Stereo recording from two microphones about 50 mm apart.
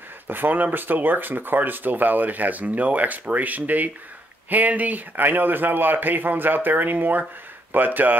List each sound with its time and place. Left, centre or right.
0.3 s speech: right